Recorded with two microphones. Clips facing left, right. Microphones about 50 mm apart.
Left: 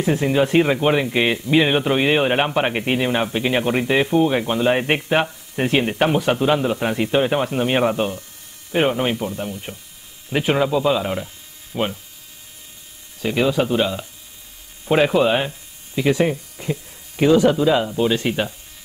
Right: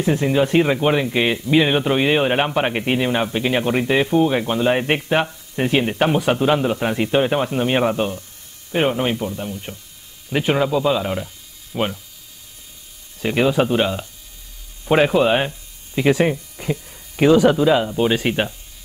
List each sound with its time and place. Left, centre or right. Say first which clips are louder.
0.0 s speech: even; centre
13.2 s speech: right 1 dB; centre
15.0 s speech: right 1 dB; centre
15.9 s speech: right 1 dB; right